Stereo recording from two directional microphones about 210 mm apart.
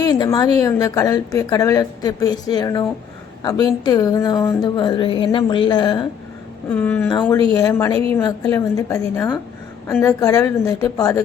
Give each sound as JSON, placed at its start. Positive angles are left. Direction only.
{"t": 0.0, "sound": "a woman's voice", "side_deg": 20}
{"t": 6.7, "sound": "a woman's voice", "side_deg": 10}